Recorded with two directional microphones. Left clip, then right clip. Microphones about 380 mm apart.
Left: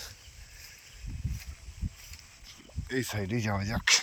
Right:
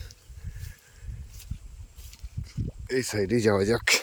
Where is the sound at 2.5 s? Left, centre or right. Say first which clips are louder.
Right 6 dB; centre.